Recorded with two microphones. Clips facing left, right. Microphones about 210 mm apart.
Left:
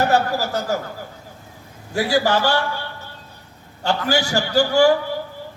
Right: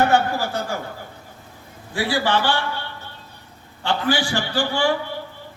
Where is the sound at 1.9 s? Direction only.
45° left (ahead or behind).